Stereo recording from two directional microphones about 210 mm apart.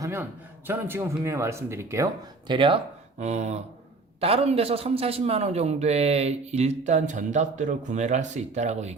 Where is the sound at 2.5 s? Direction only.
25° right (ahead or behind).